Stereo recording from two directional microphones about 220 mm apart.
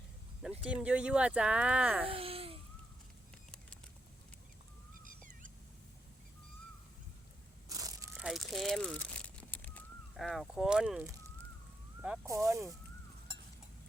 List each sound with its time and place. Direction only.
0.7 s speech: 5° right (ahead or behind)
2.0 s babbling: 25° right (ahead or behind)
5.0 s cat: 35° right (ahead or behind)
7.7 s crushing: 15° right (ahead or behind)
8.1 s a sound: centre (ahead or behind)
12.0 s speech: 10° right (ahead or behind)